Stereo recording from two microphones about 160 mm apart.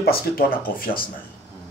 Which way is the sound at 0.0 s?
70° left (ahead or behind).